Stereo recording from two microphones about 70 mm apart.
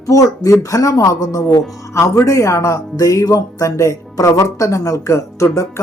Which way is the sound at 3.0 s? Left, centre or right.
Left.